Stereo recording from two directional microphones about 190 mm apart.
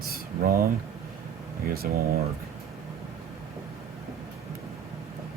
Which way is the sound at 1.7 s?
55° right (ahead or behind).